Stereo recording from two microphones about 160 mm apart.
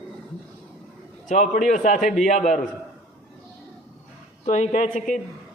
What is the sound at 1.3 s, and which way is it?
Speech, 50° left (ahead or behind).